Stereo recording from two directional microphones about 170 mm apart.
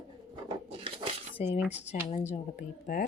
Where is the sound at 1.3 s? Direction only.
35° left (ahead or behind).